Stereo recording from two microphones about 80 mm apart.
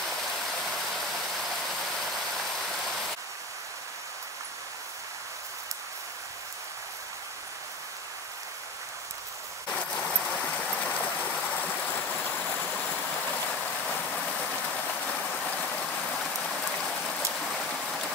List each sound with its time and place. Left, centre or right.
0.9 s vehicle: centre
9.7 s a sound: centre
17.5 s rain: centre